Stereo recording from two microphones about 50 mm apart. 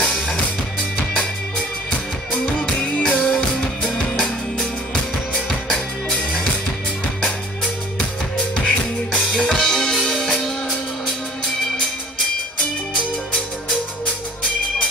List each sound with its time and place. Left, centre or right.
0.0 s music: centre
2.6 s music: centre
9.1 s music: centre
12.9 s music: centre